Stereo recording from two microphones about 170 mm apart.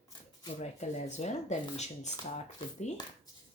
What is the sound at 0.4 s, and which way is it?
Speech, 40° left (ahead or behind).